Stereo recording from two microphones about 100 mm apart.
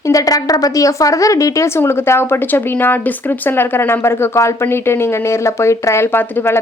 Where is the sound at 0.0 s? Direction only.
35° left (ahead or behind).